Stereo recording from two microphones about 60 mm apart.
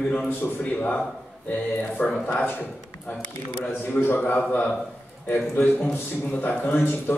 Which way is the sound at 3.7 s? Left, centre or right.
Left.